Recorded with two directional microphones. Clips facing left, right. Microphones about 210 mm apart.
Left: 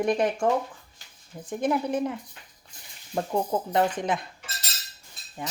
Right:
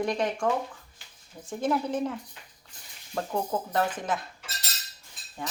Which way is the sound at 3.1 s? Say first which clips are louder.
Left 3 dB; 20° left (ahead or behind).